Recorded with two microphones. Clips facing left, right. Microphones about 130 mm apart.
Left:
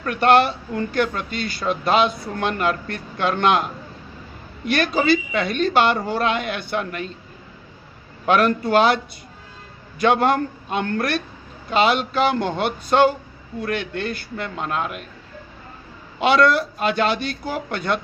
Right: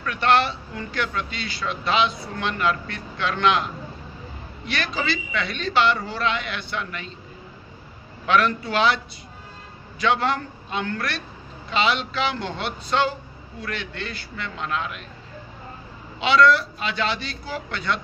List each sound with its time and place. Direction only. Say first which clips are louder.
0.0 s a man's voice: left 4 dB; 50° left (ahead or behind)
8.3 s a man's voice: left 4 dB; 50° left (ahead or behind)
16.2 s a man's voice: left 1 dB; 50° left (ahead or behind)